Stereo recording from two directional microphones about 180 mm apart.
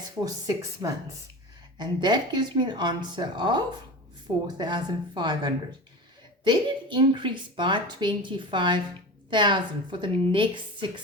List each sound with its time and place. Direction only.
0.3 s speech: 20° right (ahead or behind)